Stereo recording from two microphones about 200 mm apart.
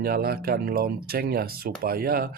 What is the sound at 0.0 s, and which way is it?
Speech, 50° right (ahead or behind).